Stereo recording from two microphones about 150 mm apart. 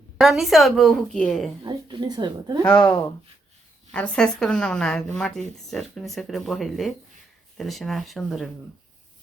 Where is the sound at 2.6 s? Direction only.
15° left (ahead or behind).